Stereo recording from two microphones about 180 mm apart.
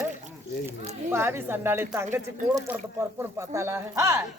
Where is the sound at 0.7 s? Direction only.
15° right (ahead or behind).